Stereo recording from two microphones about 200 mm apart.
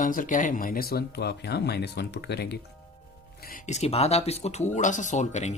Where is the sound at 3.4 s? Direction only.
40° left (ahead or behind).